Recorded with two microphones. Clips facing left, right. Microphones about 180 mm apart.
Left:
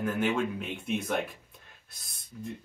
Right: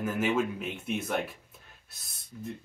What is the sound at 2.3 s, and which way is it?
Speech, 5° left (ahead or behind).